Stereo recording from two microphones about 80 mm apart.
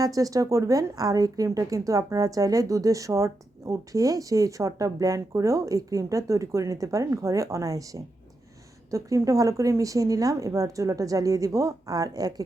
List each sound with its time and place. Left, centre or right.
0.0 s speech: right